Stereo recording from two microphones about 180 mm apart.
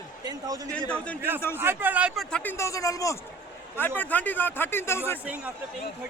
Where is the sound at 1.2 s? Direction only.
10° right (ahead or behind); by 5.2 s 15° left (ahead or behind).